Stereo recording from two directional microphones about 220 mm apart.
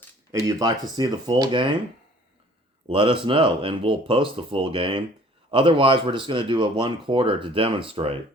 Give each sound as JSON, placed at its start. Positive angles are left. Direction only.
{"t": 0.4, "sound": "speech", "side_deg": -20}
{"t": 2.8, "sound": "speech", "side_deg": -25}